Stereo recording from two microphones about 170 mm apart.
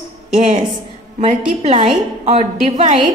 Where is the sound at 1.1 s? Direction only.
35° right (ahead or behind).